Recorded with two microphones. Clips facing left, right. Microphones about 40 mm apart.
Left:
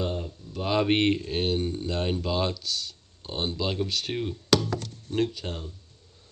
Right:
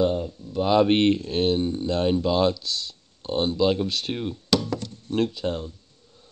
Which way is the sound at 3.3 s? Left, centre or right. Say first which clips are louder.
Right 8 dB; right.